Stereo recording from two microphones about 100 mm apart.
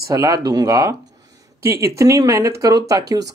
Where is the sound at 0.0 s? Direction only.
35° right (ahead or behind).